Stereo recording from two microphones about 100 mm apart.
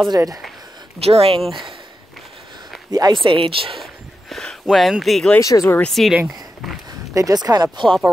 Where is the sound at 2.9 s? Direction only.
45° right (ahead or behind).